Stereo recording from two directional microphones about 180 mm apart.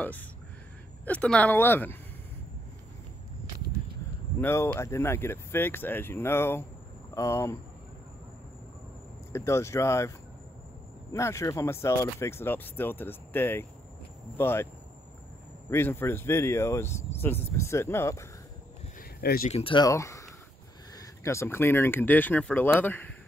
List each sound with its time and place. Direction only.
0.0 s speech: 10° left (ahead or behind)
4.4 s speech: 10° left (ahead or behind)
9.3 s speech: 15° left (ahead or behind)
15.7 s speech: 15° left (ahead or behind)
19.5 s speech: 30° left (ahead or behind); by 23.1 s 10° left (ahead or behind)